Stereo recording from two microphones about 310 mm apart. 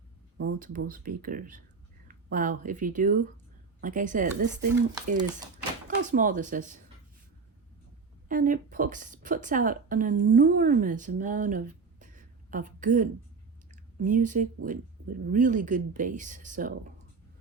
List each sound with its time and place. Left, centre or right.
0.3 s speech: right
4.7 s speech: centre
6.0 s speech: right
8.3 s a woman's voice: right